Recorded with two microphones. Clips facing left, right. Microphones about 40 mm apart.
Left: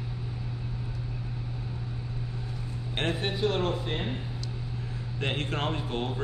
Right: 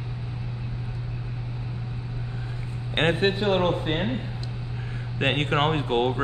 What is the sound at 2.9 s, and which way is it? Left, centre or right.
A man's voice, right.